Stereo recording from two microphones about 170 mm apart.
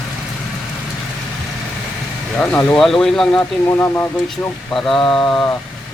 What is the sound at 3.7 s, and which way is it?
Speech, 15° left (ahead or behind).